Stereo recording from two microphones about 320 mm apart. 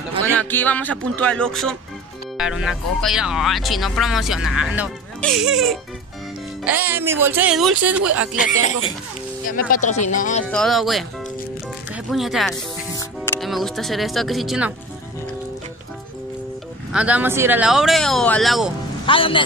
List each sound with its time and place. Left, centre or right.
0.4 s speech: centre
9.5 s speech: left
10.5 s speech: centre
12.1 s speech: centre
16.9 s speech: centre
19.0 s a man's voice: centre